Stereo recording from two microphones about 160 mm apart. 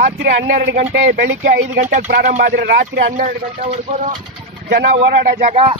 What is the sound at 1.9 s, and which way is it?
Speech, 55° right (ahead or behind).